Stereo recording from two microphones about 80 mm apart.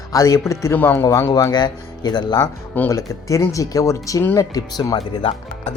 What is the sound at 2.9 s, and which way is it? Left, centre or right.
Speech, left.